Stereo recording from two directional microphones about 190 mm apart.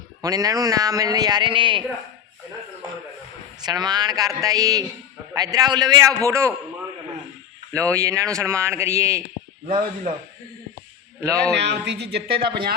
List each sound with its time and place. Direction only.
0.2 s a man's voice: 20° right (ahead or behind)
3.6 s a man's voice: 20° right (ahead or behind)
7.7 s speech: 15° right (ahead or behind)
9.6 s speech: 30° right (ahead or behind)
11.2 s speech: 15° right (ahead or behind)
11.5 s speech: 65° right (ahead or behind)